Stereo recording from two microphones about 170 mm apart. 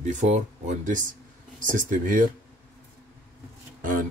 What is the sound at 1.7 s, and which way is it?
Speech, 50° right (ahead or behind).